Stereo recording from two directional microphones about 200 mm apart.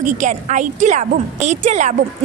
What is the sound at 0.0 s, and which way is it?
A woman's voice, 40° right (ahead or behind).